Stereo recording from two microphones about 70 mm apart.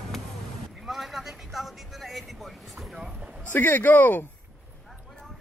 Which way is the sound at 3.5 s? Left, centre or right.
Left.